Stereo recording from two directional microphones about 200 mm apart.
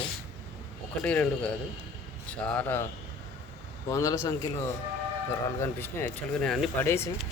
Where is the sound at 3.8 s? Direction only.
15° left (ahead or behind).